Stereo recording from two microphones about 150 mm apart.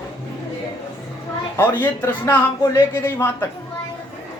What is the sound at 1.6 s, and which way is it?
Speech, 10° left (ahead or behind).